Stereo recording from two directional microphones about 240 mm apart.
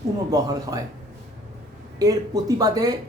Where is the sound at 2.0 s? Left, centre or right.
Centre.